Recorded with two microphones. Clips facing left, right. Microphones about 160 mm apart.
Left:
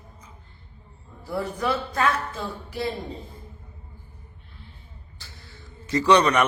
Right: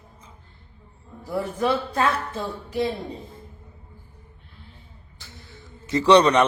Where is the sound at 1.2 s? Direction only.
20° right (ahead or behind).